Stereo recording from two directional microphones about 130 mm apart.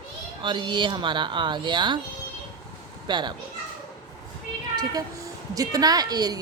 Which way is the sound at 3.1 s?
35° right (ahead or behind).